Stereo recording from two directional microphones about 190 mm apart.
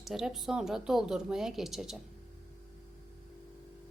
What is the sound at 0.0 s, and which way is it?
Speech, centre (ahead or behind).